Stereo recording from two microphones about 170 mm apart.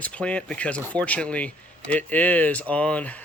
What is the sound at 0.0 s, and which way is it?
Speech, 5° left (ahead or behind).